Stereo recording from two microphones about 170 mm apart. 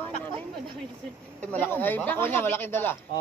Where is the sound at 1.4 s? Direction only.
10° left (ahead or behind).